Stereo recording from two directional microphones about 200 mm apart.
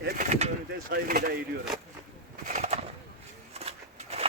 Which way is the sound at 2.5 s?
35° right (ahead or behind).